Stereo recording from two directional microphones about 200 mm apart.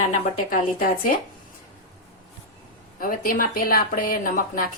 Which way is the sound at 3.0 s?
45° left (ahead or behind).